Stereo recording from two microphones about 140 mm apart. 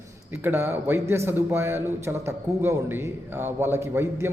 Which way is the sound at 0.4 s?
15° right (ahead or behind).